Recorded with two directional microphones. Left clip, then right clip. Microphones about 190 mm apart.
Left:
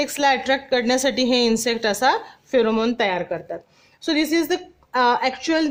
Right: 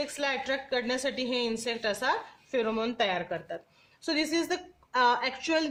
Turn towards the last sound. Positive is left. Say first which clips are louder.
# left 8 dB
turn(degrees=25)  # may be behind; listen again after turning